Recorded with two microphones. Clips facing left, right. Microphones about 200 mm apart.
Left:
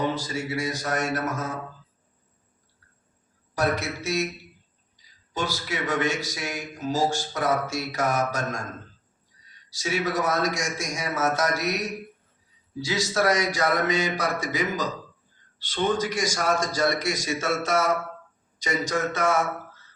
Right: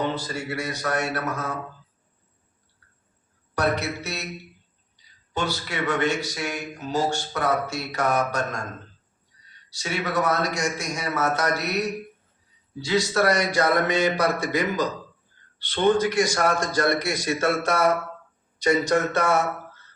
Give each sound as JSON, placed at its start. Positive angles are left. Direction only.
{"t": 0.1, "sound": "a man's voice", "side_deg": -60}
{"t": 3.5, "sound": "a man's voice", "side_deg": -60}
{"t": 5.3, "sound": "a man's voice", "side_deg": -60}
{"t": 9.6, "sound": "a man's voice", "side_deg": -60}